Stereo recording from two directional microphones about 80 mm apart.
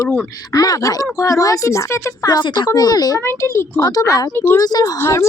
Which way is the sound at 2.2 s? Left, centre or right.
Left.